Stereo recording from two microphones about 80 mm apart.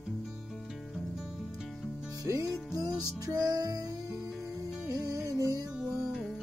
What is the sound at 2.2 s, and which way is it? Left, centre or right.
Music, right.